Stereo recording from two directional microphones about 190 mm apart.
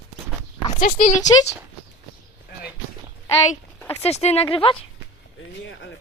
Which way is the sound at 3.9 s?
35° left (ahead or behind).